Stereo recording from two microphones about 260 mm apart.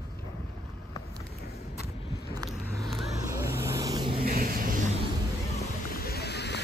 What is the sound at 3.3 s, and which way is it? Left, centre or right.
Vehicle, centre.